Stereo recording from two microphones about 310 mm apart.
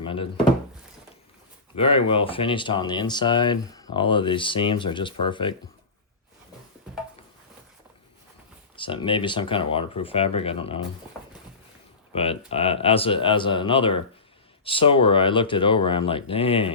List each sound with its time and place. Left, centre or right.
0.0 s speech: centre
1.7 s speech: centre
8.7 s speech: centre
12.1 s speech: centre